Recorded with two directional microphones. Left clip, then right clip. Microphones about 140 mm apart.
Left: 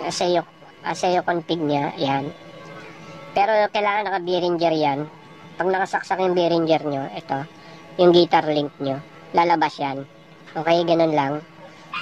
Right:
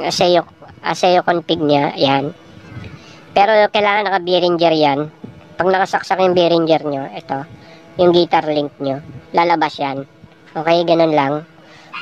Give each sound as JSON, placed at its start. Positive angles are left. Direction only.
{"t": 0.0, "sound": "a woman's voice", "side_deg": -35}
{"t": 3.3, "sound": "a woman's voice", "side_deg": -35}